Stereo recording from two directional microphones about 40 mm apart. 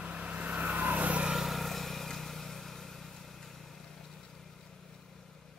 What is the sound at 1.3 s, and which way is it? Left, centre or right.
Vehicle, centre.